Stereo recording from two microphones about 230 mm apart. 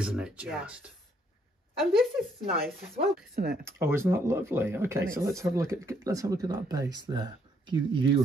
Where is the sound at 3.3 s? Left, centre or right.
Right.